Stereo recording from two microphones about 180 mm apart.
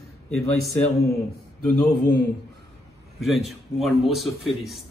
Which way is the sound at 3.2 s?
Centre (ahead or behind).